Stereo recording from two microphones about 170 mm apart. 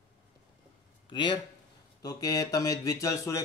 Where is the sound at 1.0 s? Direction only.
25° left (ahead or behind).